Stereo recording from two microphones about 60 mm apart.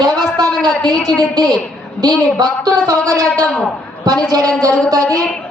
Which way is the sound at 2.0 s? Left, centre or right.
Right.